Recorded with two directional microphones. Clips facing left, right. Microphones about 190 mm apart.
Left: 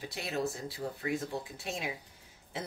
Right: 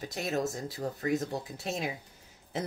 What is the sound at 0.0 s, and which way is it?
Speech, 45° right (ahead or behind).